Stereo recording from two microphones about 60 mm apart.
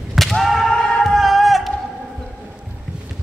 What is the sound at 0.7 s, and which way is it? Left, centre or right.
Music, centre.